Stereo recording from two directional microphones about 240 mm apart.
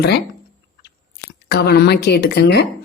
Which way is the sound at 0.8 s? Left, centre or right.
Left.